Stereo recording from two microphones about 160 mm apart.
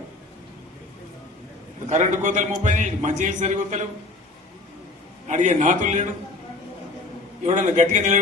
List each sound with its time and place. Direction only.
1.9 s a man's voice: 50° right (ahead or behind)
5.3 s a man's voice: 50° right (ahead or behind)
7.4 s a man's voice: 50° right (ahead or behind)